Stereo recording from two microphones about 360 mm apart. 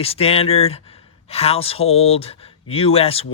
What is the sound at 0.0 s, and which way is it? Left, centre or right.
Speech, centre.